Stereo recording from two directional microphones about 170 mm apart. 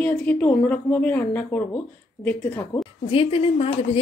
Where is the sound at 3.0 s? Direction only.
35° left (ahead or behind).